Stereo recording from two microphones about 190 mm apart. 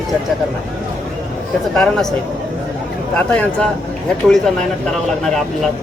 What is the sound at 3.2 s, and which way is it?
Speech, 5° left (ahead or behind).